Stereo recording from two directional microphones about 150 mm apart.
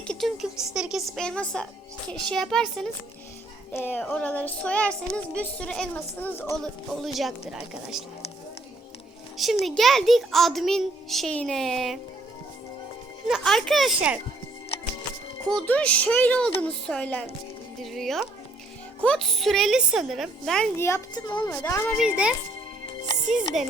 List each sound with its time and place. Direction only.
0.1 s a child's voice: centre (ahead or behind)
7.0 s a child's voice: centre (ahead or behind)
9.4 s a child's voice: centre (ahead or behind)
13.2 s a child's voice: centre (ahead or behind)
15.4 s speech: 5° left (ahead or behind)
17.9 s music: centre (ahead or behind)
19.0 s a child's voice: 5° left (ahead or behind)
20.7 s speech: 20° left (ahead or behind)
21.9 s a child's voice: 5° right (ahead or behind)